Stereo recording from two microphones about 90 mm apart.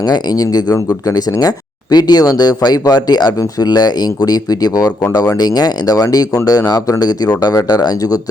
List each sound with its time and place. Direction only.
0.0 s speech: 50° left (ahead or behind)